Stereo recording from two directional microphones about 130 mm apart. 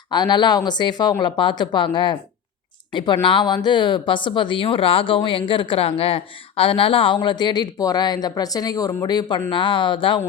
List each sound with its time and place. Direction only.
0.1 s speech: 35° left (ahead or behind)
9.5 s speech: 40° left (ahead or behind)